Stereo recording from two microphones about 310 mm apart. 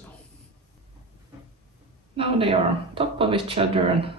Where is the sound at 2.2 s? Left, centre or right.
Centre.